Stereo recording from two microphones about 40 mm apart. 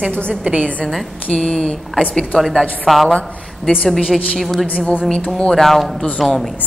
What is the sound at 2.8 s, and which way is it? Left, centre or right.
Speech, centre.